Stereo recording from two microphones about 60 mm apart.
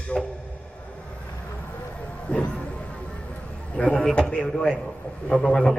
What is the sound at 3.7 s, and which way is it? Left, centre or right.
A man's voice, centre.